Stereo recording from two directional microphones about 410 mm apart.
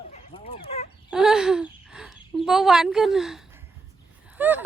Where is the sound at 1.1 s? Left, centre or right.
Centre.